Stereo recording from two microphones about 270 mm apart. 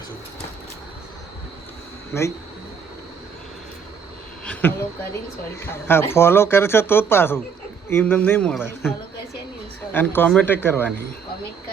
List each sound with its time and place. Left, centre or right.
2.1 s speech: centre
4.4 s a sound: centre
5.5 s speech: centre